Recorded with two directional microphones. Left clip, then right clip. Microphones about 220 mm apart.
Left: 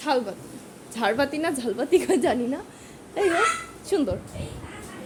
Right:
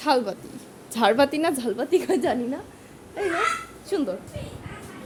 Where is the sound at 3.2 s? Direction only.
30° left (ahead or behind).